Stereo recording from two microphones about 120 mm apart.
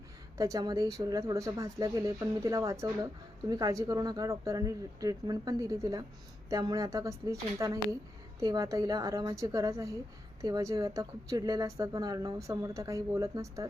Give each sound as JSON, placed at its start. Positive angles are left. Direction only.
{"t": 0.3, "sound": "speech", "side_deg": -30}